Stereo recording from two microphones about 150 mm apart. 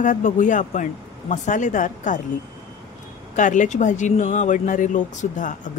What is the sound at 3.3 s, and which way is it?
Speech, 55° left (ahead or behind).